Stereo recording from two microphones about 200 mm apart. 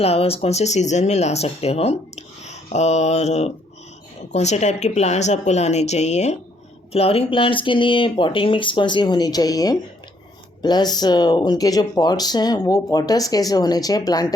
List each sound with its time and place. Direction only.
0.0 s speech: 30° left (ahead or behind)